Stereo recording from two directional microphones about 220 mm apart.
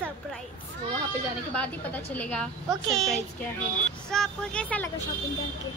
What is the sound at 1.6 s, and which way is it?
A woman's voice, 5° left (ahead or behind).